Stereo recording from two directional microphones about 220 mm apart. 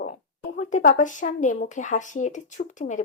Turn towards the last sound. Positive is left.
turn(degrees=35)  # may be behind; listen again after turning